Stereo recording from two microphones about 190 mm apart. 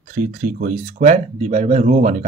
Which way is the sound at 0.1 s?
45° right (ahead or behind).